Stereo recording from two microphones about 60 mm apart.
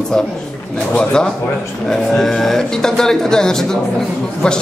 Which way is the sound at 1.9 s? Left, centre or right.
Centre.